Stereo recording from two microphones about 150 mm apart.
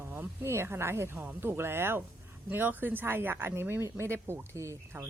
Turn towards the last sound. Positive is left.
turn(degrees=-20)  # may be behind; listen again after turning